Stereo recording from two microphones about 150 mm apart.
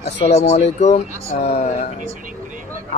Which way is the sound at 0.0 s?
45° left (ahead or behind).